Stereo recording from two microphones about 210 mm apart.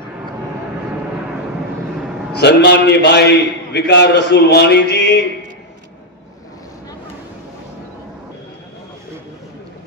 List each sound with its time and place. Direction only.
2.3 s a man's voice: 50° left (ahead or behind)